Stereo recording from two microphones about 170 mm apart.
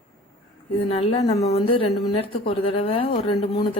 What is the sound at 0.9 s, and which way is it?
A woman's voice, 35° left (ahead or behind).